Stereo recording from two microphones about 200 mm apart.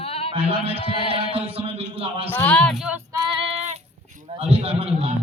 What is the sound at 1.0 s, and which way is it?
Mantra, 25° left (ahead or behind).